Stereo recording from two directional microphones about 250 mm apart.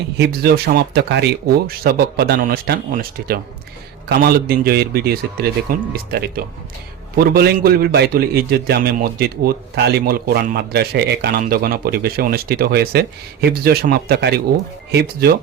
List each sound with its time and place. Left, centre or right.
0.2 s a man's voice: right